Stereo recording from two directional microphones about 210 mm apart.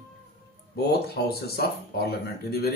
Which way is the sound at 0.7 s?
50° left (ahead or behind).